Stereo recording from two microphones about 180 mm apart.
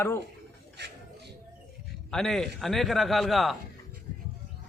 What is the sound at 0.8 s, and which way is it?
Speech, 75° right (ahead or behind).